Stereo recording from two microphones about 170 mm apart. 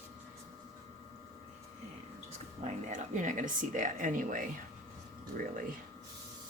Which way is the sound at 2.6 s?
45° right (ahead or behind).